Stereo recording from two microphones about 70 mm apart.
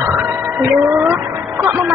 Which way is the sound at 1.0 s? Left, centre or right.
Right.